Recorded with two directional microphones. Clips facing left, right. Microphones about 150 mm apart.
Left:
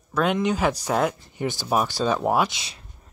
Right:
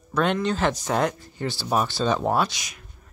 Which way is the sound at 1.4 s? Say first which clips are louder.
Left 1 dB; 15° left (ahead or behind).